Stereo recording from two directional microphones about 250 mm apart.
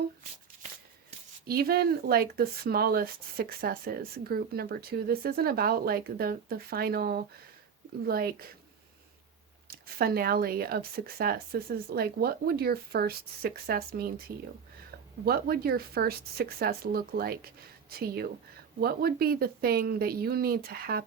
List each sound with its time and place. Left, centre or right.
1.5 s speech: right
9.6 s speech: right
15.2 s speech: right